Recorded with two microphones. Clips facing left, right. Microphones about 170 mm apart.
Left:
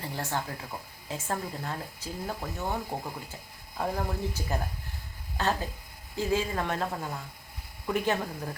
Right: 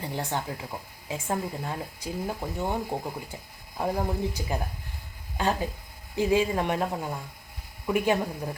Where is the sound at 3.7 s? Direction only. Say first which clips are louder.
Right 3 dB; 15° right (ahead or behind).